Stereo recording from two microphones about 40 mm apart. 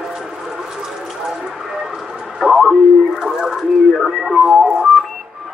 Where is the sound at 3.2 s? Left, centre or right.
Centre.